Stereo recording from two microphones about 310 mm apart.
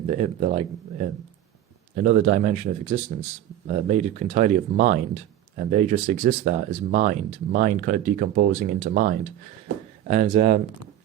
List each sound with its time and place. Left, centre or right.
0.1 s speech: right